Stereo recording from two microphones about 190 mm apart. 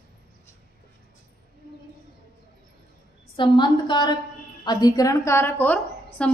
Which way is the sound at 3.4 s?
25° left (ahead or behind).